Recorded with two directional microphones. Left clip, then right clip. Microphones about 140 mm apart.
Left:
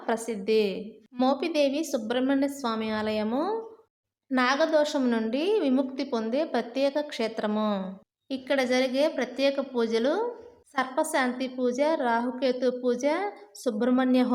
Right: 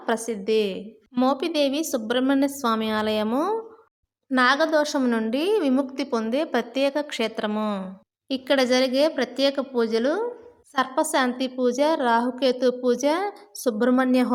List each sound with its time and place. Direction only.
0.0 s a woman's voice: 20° right (ahead or behind)
8.3 s a woman's voice: 30° right (ahead or behind)